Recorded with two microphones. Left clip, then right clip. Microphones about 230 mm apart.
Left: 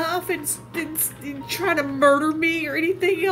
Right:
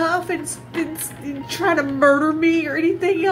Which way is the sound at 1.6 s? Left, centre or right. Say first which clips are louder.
Right 2 dB; left.